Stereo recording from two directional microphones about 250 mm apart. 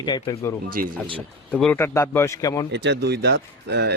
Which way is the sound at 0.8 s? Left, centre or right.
Right.